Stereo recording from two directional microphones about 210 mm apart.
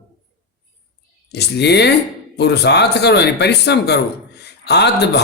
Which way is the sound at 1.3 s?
55° left (ahead or behind).